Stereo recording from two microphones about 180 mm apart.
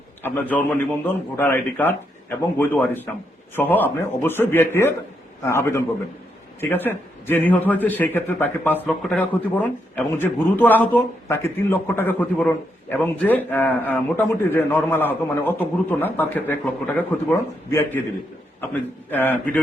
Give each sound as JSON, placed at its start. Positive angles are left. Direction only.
{"t": 0.2, "sound": "a man's voice", "side_deg": 10}